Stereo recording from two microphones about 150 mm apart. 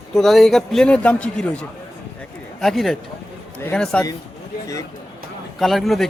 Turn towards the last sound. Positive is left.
turn(degrees=0)  # may be behind; listen again after turning